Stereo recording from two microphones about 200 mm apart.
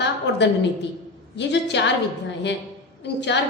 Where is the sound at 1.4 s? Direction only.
60° left (ahead or behind).